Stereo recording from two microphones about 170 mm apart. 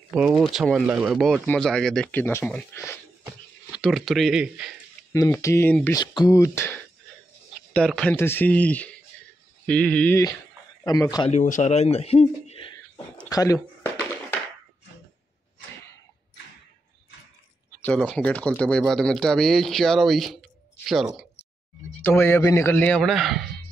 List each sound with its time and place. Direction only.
0.1 s speech: 5° right (ahead or behind)
3.8 s speech: centre (ahead or behind)
5.1 s a man's voice: 20° left (ahead or behind)
7.7 s a man's voice: 5° left (ahead or behind)
10.8 s speech: 20° left (ahead or behind)
11.2 s speech: 45° left (ahead or behind)
13.3 s speech: 20° left (ahead or behind)
17.8 s speech: 5° left (ahead or behind)
22.0 s a man's voice: 10° left (ahead or behind)